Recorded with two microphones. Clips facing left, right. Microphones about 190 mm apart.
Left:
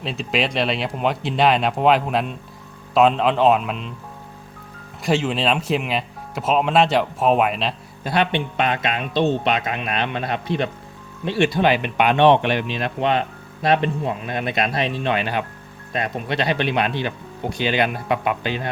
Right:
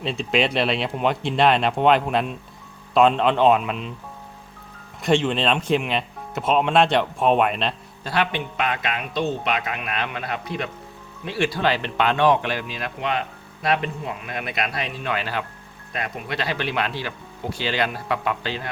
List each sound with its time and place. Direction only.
0.0 s speech: centre (ahead or behind)
5.0 s speech: 5° left (ahead or behind)
8.0 s speech: 20° left (ahead or behind)